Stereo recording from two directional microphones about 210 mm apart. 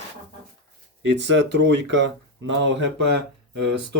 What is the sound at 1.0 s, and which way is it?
Speech, 55° right (ahead or behind).